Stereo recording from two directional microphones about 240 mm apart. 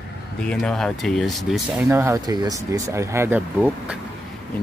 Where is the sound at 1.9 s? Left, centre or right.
Centre.